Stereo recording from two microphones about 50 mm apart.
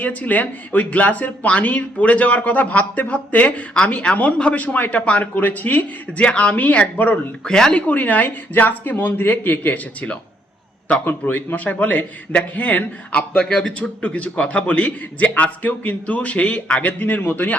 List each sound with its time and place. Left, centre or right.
0.0 s speech: left
7.4 s speech: centre
7.7 s speech: left
11.0 s a man's voice: left
17.0 s speech: left